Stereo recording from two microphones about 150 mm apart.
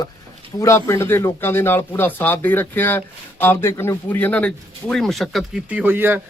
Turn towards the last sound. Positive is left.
turn(degrees=-15)  # may be behind; listen again after turning